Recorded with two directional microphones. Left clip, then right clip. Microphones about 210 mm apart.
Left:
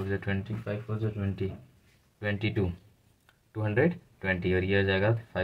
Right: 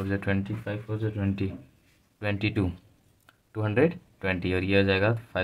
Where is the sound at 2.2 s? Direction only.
40° right (ahead or behind).